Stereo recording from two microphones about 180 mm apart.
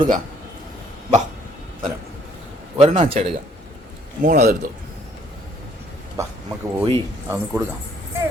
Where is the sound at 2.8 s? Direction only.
30° right (ahead or behind).